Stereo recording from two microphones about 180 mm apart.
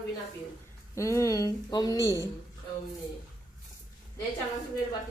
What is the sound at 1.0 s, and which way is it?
A woman's voice, 15° left (ahead or behind).